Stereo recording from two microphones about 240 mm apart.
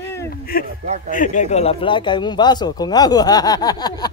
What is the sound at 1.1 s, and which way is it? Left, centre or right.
Speech, left.